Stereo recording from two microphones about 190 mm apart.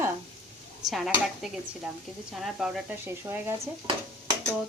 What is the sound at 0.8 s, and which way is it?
Speech, centre (ahead or behind).